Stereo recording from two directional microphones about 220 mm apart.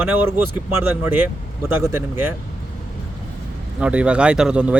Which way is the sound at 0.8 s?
5° right (ahead or behind).